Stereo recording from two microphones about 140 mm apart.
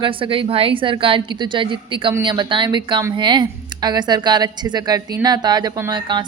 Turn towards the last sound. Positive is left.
turn(degrees=-30)  # may be behind; listen again after turning